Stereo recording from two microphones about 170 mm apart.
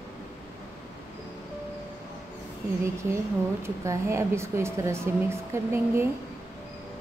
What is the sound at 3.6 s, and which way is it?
Speech, 15° right (ahead or behind).